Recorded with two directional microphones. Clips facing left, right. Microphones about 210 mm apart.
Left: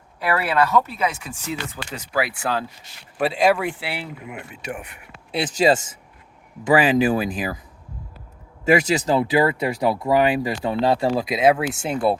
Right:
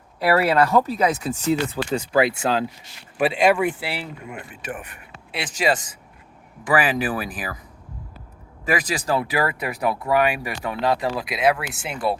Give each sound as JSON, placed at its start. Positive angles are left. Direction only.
{"t": 0.2, "sound": "speech", "side_deg": -35}
{"t": 3.2, "sound": "speech", "side_deg": 0}
{"t": 4.4, "sound": "speech", "side_deg": 10}
{"t": 5.5, "sound": "speech", "side_deg": 25}
{"t": 8.6, "sound": "speech", "side_deg": 25}